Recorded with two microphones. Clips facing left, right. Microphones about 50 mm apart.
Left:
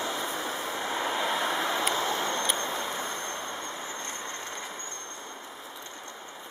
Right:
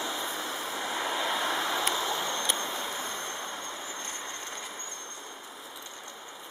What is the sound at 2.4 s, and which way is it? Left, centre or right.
Vehicle, centre.